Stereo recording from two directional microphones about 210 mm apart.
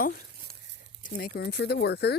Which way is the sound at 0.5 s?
45° right (ahead or behind).